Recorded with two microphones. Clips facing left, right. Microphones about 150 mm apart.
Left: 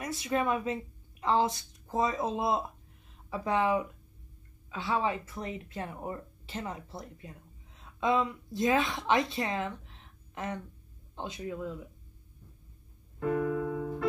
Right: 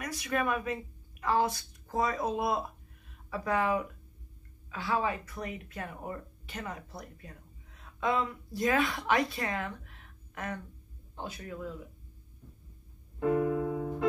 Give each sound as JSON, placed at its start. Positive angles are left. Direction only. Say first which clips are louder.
{"t": 0.0, "sound": "speech", "louder": "left 2 dB", "side_deg": 25}
{"t": 13.2, "sound": "piano", "louder": "right 2 dB", "side_deg": -15}